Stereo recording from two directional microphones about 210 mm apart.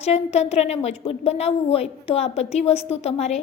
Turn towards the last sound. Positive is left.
turn(degrees=30)  # may be behind; listen again after turning